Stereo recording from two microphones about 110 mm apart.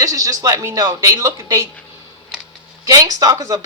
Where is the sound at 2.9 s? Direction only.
35° right (ahead or behind).